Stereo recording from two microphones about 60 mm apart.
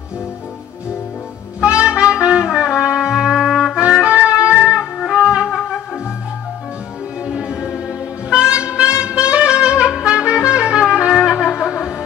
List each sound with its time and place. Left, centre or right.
1.6 s trumpet: centre
3.1 s music: centre
5.2 s wind instrument: centre
7.2 s music: centre
8.3 s saxophone: centre
10.5 s trumpet: centre
11.0 s music: centre